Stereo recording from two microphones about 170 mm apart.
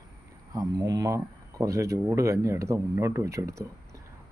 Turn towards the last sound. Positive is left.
turn(degrees=-20)  # may be behind; listen again after turning